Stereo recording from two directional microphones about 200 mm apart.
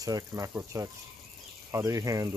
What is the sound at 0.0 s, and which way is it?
Speech, 15° right (ahead or behind).